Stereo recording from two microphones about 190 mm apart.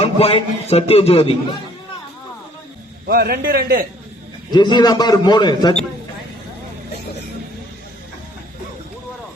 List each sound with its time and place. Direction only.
0.0 s a man's voice: 30° left (ahead or behind)
3.1 s a man's voice: 55° right (ahead or behind)
4.5 s a man's voice: 25° left (ahead or behind)